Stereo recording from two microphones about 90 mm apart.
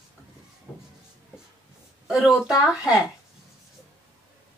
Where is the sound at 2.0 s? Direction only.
5° right (ahead or behind).